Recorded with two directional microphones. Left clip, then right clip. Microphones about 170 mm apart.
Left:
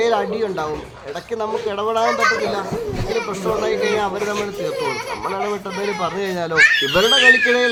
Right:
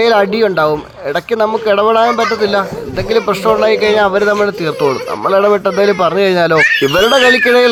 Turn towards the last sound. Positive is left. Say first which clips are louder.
# right 5 dB
turn(degrees=-40)  # may be behind; listen again after turning